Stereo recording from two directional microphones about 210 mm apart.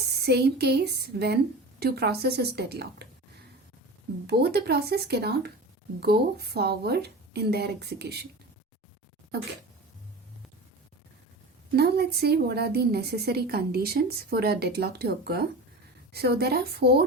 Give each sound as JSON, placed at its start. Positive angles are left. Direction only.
{"t": 0.2, "sound": "a woman's voice", "side_deg": -50}
{"t": 4.3, "sound": "a woman's voice", "side_deg": -50}
{"t": 11.8, "sound": "a woman's voice", "side_deg": -50}